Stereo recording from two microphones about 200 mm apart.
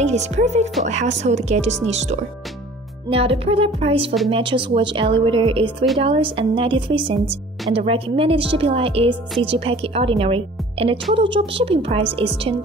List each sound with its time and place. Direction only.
0.0 s a woman's voice: 35° right (ahead or behind)